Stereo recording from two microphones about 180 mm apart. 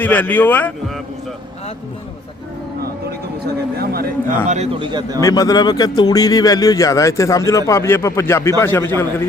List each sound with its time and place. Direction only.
0.0 s speech: 10° left (ahead or behind)
3.4 s a man's voice: 60° right (ahead or behind)
4.4 s a man's voice: 40° right (ahead or behind)
4.9 s a man's voice: 20° right (ahead or behind)
5.2 s speech: 20° left (ahead or behind)